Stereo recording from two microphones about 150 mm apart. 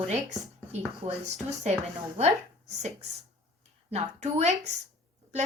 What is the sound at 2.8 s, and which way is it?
A woman's voice, 50° right (ahead or behind).